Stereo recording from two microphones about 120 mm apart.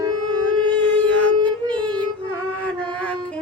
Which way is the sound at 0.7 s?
10° left (ahead or behind).